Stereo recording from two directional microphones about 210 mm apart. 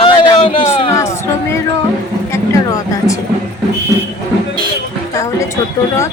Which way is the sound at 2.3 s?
15° left (ahead or behind).